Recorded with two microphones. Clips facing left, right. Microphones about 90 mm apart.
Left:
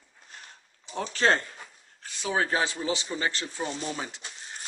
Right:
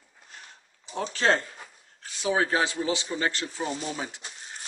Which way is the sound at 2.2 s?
15° right (ahead or behind).